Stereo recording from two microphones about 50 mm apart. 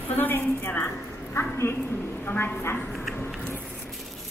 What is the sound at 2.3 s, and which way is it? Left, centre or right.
Speech, left.